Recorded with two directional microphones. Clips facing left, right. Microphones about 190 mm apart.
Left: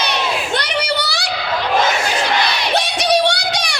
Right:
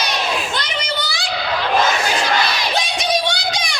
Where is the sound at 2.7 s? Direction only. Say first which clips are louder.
Left 6 dB; 70° left (ahead or behind).